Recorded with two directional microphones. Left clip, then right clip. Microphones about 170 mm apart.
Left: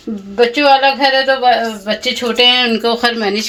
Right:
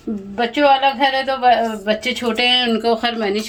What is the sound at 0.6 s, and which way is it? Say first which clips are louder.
Speech: left 2 dB; 25° left (ahead or behind).